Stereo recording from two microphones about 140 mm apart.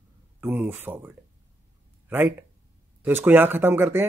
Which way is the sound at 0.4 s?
15° right (ahead or behind).